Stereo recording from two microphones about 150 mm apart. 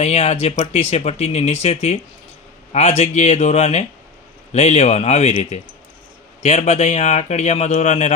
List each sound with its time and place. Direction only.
0.0 s a man's voice: 45° left (ahead or behind)